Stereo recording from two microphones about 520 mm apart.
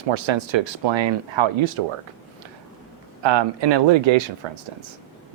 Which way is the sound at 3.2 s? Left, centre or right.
Right.